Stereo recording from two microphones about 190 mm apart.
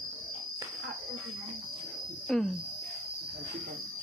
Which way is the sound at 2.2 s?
Centre (ahead or behind).